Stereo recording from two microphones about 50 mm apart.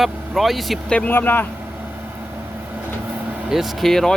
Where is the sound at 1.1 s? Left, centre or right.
Left.